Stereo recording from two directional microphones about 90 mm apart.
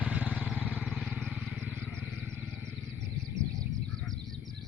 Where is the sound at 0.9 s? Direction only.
Centre (ahead or behind).